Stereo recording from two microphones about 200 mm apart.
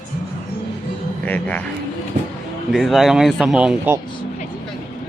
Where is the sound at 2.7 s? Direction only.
Centre (ahead or behind).